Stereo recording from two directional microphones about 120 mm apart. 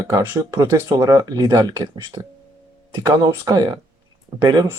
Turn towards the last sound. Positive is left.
turn(degrees=-35)  # may be behind; listen again after turning